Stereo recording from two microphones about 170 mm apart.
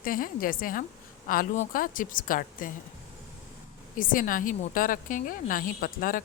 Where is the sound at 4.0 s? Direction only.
55° left (ahead or behind).